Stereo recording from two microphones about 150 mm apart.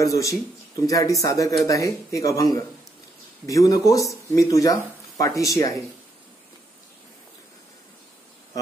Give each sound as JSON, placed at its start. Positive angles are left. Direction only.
{"t": 0.0, "sound": "a man's voice", "side_deg": 20}